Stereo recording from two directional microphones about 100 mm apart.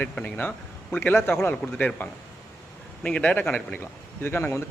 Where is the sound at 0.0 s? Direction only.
15° left (ahead or behind).